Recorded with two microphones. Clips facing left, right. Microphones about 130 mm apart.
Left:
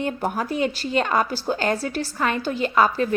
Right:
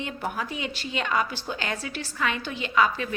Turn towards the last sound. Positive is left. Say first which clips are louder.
# left 5 dB
turn(degrees=40)  # may be behind; listen again after turning